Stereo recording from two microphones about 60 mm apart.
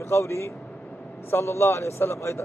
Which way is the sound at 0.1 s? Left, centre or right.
Left.